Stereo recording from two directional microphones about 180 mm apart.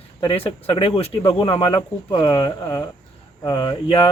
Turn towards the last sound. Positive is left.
turn(degrees=30)  # may be behind; listen again after turning